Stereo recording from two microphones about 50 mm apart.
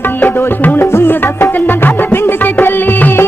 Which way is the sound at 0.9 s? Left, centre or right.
Left.